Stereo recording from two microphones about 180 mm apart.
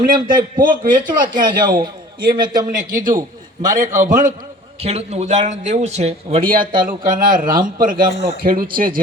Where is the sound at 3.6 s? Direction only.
45° right (ahead or behind).